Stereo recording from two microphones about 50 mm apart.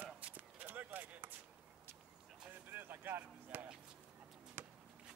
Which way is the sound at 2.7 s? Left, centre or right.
Right.